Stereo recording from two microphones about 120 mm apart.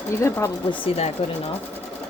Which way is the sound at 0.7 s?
45° left (ahead or behind).